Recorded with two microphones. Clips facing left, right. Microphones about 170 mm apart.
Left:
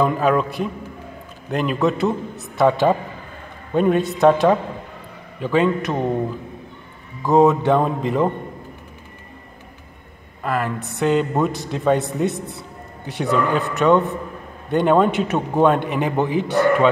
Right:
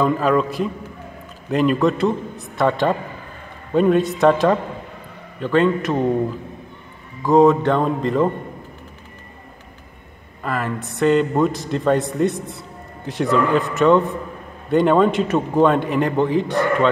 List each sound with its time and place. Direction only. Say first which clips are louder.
0.0 s a man's voice: even; centre (ahead or behind)
7.2 s a man's voice: right 1 dB; 5° left (ahead or behind)
10.4 s a man's voice: left 1 dB; centre (ahead or behind)